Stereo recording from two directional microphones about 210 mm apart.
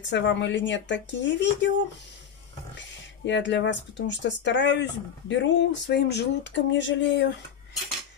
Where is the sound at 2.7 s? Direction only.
55° left (ahead or behind).